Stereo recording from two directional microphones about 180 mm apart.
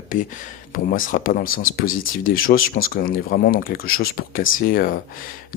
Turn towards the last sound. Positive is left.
turn(degrees=50)  # may be behind; listen again after turning